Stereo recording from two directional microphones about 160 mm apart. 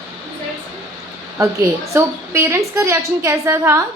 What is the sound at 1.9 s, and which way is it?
A woman's voice, 15° right (ahead or behind).